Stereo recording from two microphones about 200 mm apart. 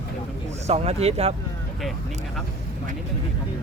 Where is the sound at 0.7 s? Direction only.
30° right (ahead or behind).